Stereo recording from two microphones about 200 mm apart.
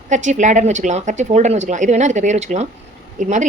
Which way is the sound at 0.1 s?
35° right (ahead or behind).